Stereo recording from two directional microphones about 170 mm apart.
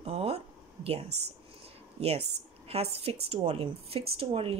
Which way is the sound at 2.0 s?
35° right (ahead or behind).